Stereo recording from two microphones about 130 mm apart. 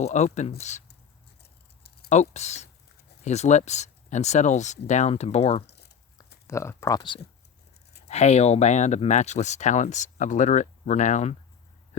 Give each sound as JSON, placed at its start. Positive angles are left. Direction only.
{"t": 0.0, "sound": "speech", "side_deg": 60}
{"t": 2.0, "sound": "speech", "side_deg": 60}
{"t": 6.1, "sound": "a sound", "side_deg": 20}
{"t": 8.0, "sound": "speech", "side_deg": 55}